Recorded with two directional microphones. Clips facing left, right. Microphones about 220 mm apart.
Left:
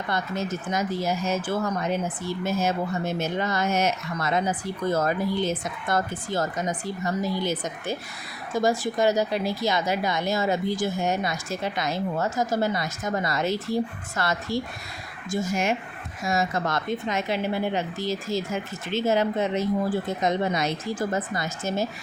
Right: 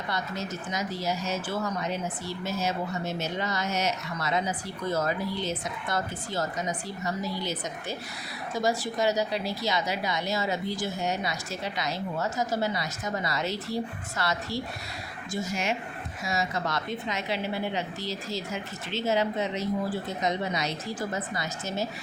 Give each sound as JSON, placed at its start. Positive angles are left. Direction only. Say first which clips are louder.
{"t": 0.1, "sound": "speech", "louder": "left 5 dB", "side_deg": 50}